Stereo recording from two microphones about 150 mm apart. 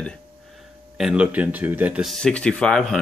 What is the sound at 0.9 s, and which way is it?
Speech, 5° right (ahead or behind).